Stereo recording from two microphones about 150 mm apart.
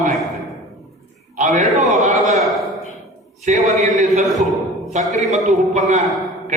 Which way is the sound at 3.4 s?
55° right (ahead or behind).